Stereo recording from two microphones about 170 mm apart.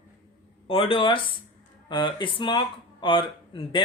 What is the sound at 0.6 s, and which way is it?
Speech, 35° left (ahead or behind).